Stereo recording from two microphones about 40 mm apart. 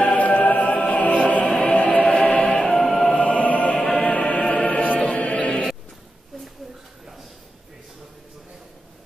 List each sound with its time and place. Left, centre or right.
0.0 s music: left
2.8 s music: centre
3.1 s music: left
3.7 s music: left
4.0 s music: left